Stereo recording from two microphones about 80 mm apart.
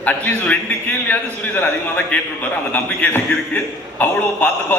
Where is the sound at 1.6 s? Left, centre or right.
Centre.